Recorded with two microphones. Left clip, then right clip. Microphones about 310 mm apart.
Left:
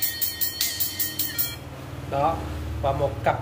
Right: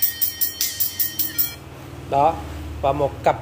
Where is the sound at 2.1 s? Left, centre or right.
Centre.